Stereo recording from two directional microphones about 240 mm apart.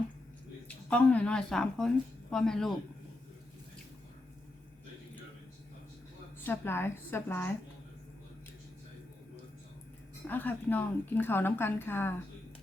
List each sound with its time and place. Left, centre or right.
0.7 s a woman's voice: centre
6.4 s a woman's voice: centre
10.2 s a woman's voice: centre